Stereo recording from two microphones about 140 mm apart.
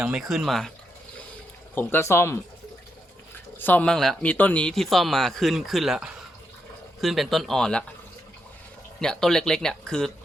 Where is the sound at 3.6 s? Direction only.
10° left (ahead or behind).